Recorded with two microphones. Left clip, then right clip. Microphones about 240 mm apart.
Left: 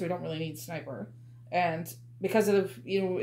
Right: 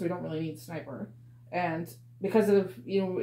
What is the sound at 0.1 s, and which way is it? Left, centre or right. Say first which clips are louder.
Speech: even; left.